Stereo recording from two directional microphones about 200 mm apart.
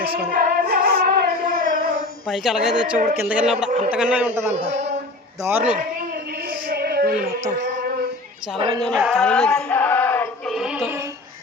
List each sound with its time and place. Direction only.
0.3 s music: 45° right (ahead or behind)
2.2 s speech: centre (ahead or behind)
3.7 s speech: 35° right (ahead or behind)
3.9 s a man's voice: 5° right (ahead or behind)
4.5 s speech: 30° right (ahead or behind)
5.4 s a man's voice: 10° right (ahead or behind)
6.5 s music: 50° right (ahead or behind)
8.5 s a woman's voice: 25° right (ahead or behind)
8.8 s speech: centre (ahead or behind)
9.6 s music: 10° left (ahead or behind)